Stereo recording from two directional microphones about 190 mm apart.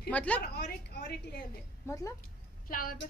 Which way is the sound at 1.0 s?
55° left (ahead or behind).